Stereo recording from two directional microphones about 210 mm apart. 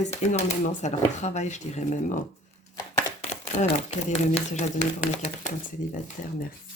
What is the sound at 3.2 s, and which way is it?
Speech, 35° left (ahead or behind).